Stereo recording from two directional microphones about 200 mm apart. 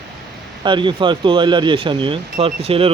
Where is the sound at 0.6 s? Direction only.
25° right (ahead or behind).